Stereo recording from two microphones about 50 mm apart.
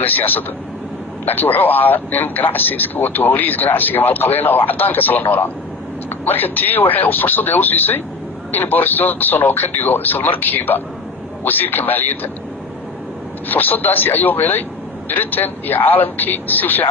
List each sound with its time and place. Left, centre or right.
0.0 s a man's voice: left
13.5 s a man's voice: left